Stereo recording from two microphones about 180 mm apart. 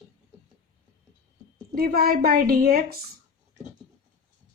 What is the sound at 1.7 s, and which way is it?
Speech, 55° right (ahead or behind).